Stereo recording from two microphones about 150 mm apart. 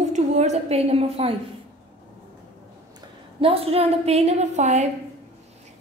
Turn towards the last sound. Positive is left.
turn(degrees=-50)  # may be behind; listen again after turning